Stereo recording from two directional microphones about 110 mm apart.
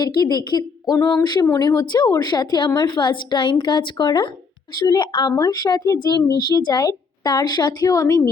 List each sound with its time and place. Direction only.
0.0 s a woman's voice: 40° left (ahead or behind)